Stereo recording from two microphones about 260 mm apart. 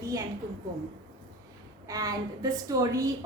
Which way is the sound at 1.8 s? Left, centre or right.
Centre.